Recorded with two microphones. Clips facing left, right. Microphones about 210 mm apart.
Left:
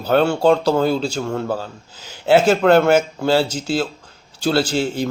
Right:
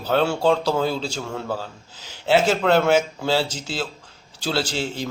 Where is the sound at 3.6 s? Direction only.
60° left (ahead or behind).